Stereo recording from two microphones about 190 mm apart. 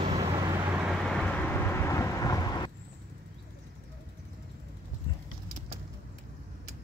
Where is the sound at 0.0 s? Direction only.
25° right (ahead or behind).